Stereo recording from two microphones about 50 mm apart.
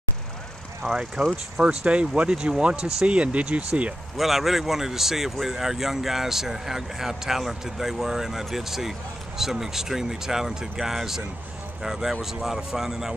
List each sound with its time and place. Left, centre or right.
0.8 s speech: centre
1.9 s speech: right
4.2 s speech: centre